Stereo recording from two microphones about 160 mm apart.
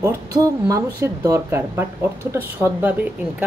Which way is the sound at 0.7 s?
20° right (ahead or behind).